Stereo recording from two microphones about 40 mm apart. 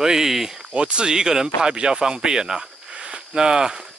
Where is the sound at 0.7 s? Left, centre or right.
Right.